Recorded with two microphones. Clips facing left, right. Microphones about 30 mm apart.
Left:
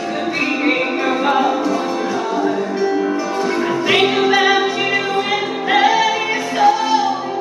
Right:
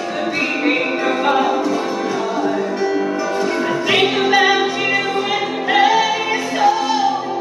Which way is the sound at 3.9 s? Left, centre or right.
Centre.